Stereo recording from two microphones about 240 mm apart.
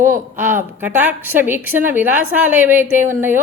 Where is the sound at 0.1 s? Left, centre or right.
Right.